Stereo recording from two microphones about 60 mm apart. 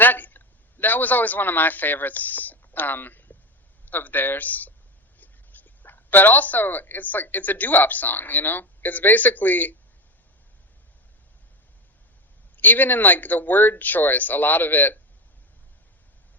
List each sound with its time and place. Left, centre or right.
0.0 s a man's voice: left
12.5 s speech: left